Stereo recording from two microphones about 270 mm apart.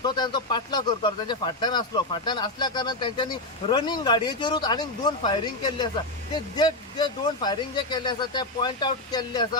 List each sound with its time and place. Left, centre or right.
0.0 s speech: centre